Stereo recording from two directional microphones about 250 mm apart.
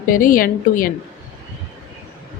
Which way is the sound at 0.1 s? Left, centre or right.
Left.